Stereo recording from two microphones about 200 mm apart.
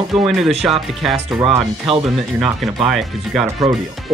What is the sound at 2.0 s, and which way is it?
Speech, centre (ahead or behind).